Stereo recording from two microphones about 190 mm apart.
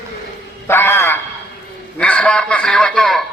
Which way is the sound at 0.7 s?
10° left (ahead or behind).